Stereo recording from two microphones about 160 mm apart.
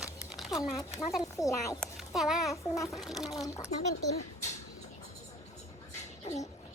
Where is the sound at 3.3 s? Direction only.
20° left (ahead or behind).